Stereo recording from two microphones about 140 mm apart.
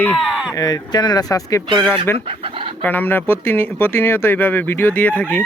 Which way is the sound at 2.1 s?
40° right (ahead or behind).